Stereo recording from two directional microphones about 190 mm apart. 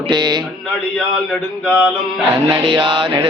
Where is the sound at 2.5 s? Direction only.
20° right (ahead or behind).